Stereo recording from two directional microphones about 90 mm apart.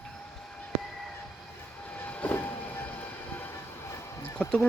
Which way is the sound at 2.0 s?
15° left (ahead or behind).